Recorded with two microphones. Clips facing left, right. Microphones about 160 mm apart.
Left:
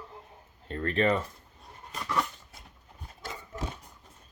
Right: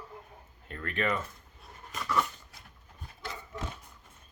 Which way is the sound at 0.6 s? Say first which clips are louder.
Left 6 dB; 35° left (ahead or behind).